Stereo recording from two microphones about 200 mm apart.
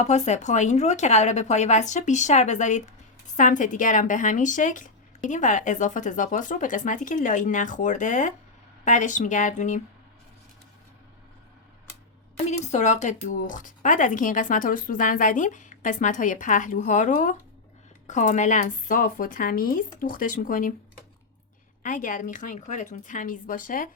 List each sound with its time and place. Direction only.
0.0 s speech: 35° left (ahead or behind)
12.5 s speech: 35° left (ahead or behind)
21.8 s speech: 40° left (ahead or behind)